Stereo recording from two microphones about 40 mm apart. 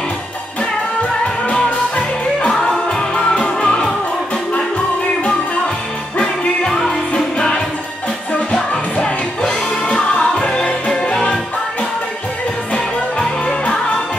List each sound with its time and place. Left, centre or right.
3.4 s music: centre
6.1 s music: left
10.4 s music: left
13.5 s music: left